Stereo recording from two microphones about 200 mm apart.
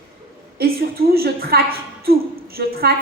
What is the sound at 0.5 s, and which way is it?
A woman's voice, 50° right (ahead or behind).